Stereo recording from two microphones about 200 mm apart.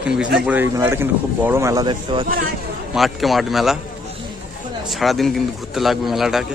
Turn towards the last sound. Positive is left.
turn(degrees=0)  # may be behind; listen again after turning